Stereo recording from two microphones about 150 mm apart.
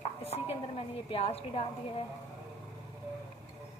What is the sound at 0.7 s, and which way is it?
A woman's voice, 40° left (ahead or behind).